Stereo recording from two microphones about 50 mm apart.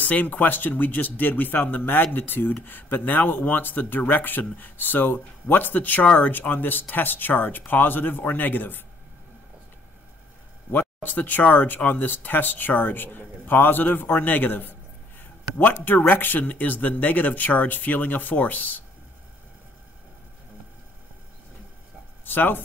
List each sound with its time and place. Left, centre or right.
0.0 s speech: left
10.7 s speech: left
22.2 s speech: left